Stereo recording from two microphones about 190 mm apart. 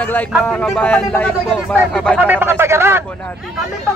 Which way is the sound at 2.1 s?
10° right (ahead or behind).